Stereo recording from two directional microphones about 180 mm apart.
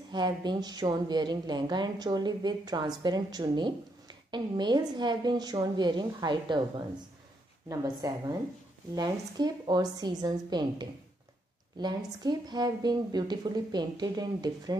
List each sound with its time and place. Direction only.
0.1 s speech: 25° right (ahead or behind)
7.6 s speech: 20° right (ahead or behind)